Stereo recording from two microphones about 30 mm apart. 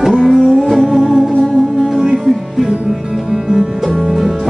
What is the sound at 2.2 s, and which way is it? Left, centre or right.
Music, centre.